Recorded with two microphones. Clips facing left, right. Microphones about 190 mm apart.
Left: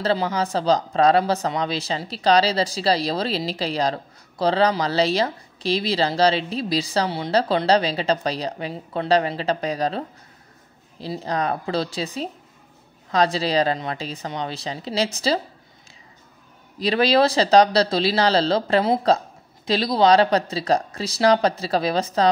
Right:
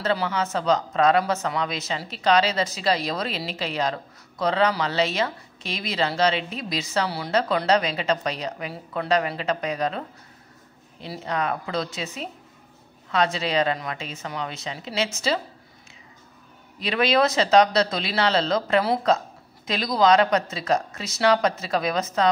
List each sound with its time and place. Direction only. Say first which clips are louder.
0.0 s speech: left 3 dB; 30° left (ahead or behind)
16.7 s speech: left 3 dB; 35° left (ahead or behind)